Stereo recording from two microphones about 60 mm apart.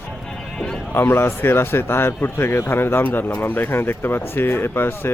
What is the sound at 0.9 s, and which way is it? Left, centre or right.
Speech, left.